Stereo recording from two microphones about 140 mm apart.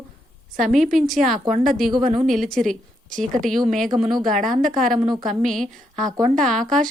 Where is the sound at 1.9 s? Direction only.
35° right (ahead or behind).